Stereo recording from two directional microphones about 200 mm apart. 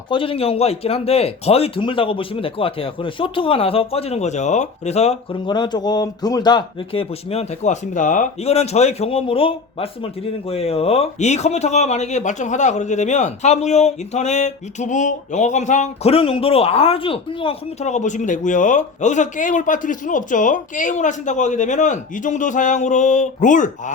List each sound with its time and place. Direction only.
0.1 s a man's voice: 25° left (ahead or behind)